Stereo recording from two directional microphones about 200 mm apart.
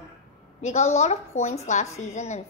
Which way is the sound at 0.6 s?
35° left (ahead or behind).